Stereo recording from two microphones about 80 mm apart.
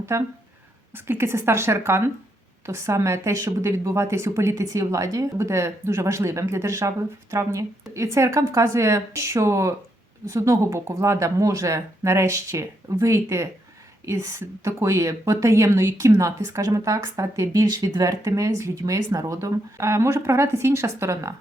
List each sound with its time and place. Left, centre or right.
0.0 s speech: right